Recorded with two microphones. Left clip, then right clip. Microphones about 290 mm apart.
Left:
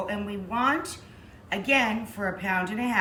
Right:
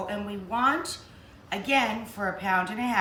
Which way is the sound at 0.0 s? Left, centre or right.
Centre.